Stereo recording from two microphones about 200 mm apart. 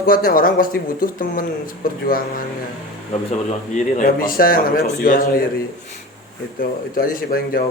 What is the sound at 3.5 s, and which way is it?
A man's voice, 40° left (ahead or behind).